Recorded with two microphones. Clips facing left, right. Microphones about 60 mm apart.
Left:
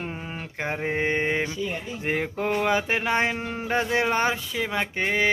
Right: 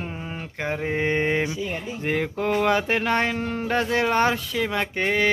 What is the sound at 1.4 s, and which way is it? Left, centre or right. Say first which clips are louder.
Speech: right 2 dB; centre.